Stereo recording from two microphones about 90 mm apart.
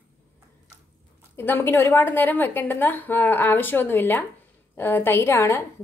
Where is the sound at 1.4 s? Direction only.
25° left (ahead or behind).